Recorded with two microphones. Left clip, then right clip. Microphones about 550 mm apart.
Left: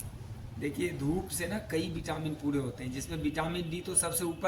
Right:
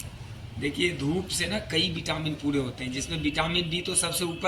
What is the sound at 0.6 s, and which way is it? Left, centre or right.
A man's voice, left.